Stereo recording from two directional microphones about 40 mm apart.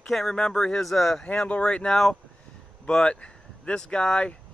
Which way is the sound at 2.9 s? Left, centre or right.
Left.